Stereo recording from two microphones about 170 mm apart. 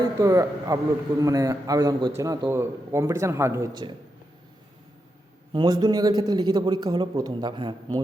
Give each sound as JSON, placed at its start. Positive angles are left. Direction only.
{"t": 0.2, "sound": "a man's voice", "side_deg": -20}
{"t": 5.5, "sound": "a man's voice", "side_deg": -25}